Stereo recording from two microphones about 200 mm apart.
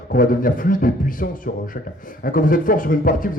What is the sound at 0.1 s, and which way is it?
A man's voice, 45° left (ahead or behind).